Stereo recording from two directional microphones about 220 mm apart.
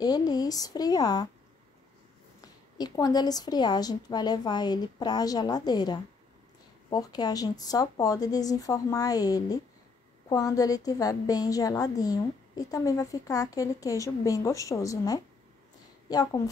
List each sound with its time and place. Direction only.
0.0 s a woman's voice: 15° left (ahead or behind)
2.4 s a woman's voice: 15° left (ahead or behind)